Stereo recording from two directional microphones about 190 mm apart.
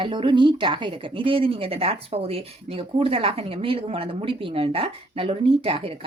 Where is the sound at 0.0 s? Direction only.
25° right (ahead or behind).